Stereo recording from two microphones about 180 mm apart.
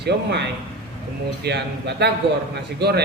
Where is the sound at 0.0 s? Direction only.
65° right (ahead or behind).